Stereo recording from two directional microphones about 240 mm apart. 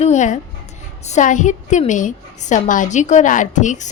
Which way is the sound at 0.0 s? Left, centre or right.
Left.